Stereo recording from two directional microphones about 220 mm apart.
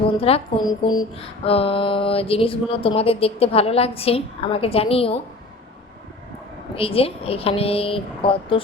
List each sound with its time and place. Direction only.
0.2 s speech: 25° left (ahead or behind)
6.7 s speech: 25° left (ahead or behind)